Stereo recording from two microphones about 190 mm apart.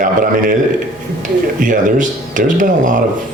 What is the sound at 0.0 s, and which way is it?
Speech, 45° right (ahead or behind).